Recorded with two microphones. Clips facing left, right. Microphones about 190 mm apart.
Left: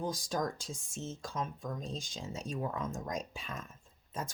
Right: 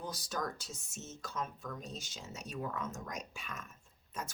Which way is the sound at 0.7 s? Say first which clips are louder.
Left 6 dB; 30° left (ahead or behind).